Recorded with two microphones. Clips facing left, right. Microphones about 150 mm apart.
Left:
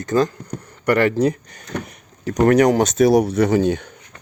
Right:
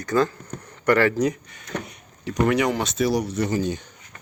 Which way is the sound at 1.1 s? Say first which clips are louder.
Left 4 dB; 30° left (ahead or behind).